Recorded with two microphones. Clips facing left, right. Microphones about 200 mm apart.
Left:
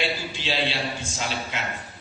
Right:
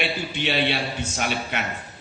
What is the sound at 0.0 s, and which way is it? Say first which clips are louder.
A man's voice: right 2 dB; 65° right (ahead or behind).